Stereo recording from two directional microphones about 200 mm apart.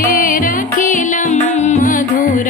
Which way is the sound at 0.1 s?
45° left (ahead or behind).